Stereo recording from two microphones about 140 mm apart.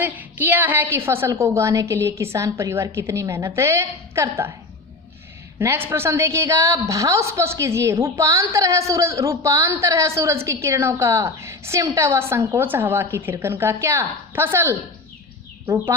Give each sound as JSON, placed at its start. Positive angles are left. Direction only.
{"t": 0.0, "sound": "a woman's voice", "side_deg": -15}
{"t": 5.5, "sound": "a woman's voice", "side_deg": -15}